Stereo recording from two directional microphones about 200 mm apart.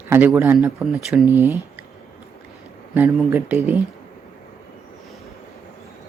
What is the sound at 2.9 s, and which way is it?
Speech, 10° right (ahead or behind).